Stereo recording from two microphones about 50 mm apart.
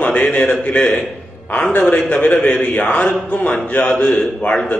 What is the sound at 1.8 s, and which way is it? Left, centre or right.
Speech, centre.